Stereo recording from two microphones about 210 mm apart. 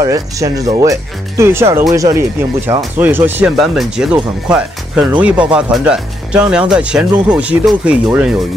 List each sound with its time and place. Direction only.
0.0 s speech: 15° right (ahead or behind)